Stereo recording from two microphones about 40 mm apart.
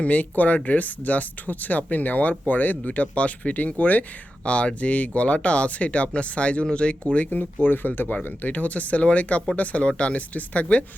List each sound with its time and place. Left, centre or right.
0.0 s speech: left
4.4 s speech: left
7.3 s speech: left